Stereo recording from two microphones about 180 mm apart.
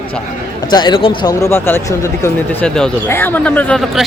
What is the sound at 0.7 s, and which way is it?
Speech, 25° left (ahead or behind).